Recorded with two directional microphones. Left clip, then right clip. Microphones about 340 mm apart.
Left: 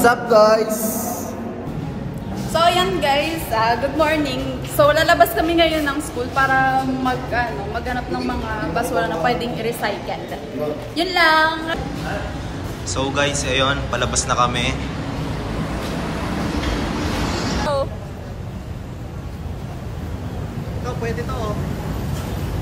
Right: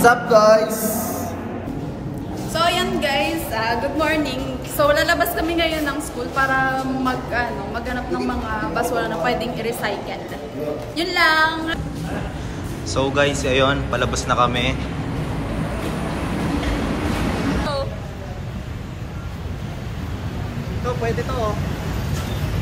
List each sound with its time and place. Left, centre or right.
0.0 s a sound: centre
2.5 s a woman's voice: centre
12.9 s a woman's voice: centre